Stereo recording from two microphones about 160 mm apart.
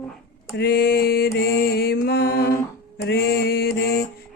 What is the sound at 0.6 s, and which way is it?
Mantra, 70° left (ahead or behind).